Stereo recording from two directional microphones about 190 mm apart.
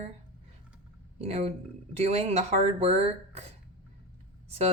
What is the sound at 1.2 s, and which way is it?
Speech, 35° right (ahead or behind).